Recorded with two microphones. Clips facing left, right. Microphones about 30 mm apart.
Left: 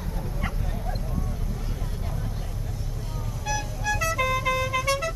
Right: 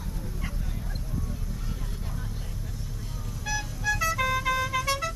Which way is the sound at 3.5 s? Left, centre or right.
Centre.